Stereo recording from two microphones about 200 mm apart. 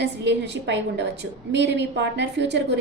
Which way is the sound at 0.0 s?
60° right (ahead or behind).